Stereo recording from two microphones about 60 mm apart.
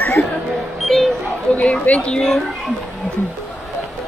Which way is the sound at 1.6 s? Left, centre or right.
Centre.